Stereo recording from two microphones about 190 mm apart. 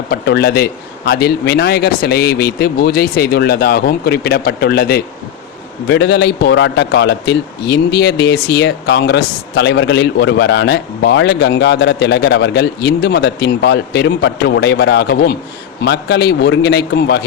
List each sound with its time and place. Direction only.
0.1 s a man's voice: 55° left (ahead or behind)